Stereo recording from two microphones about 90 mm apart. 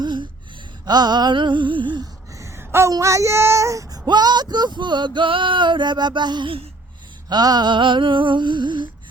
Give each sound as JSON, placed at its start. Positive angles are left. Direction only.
{"t": 0.0, "sound": "gasp", "side_deg": -60}
{"t": 0.9, "sound": "male singing", "side_deg": -50}
{"t": 2.3, "sound": "a sound", "side_deg": -35}
{"t": 2.9, "sound": "speech", "side_deg": -35}
{"t": 4.8, "sound": "male singing", "side_deg": -55}